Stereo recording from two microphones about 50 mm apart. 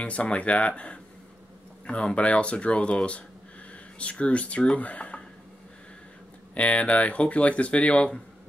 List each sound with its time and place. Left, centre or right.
0.0 s speech: left
6.5 s speech: left